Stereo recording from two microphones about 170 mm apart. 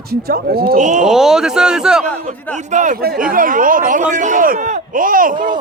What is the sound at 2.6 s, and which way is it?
A man's voice, 45° right (ahead or behind).